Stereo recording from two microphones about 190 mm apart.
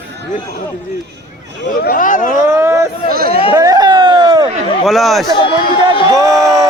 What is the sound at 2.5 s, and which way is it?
Speech, 15° right (ahead or behind).